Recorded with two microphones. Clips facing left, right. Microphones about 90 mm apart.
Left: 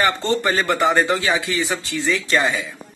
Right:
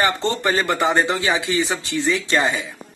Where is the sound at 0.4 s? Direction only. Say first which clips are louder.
Left 1 dB; 20° right (ahead or behind).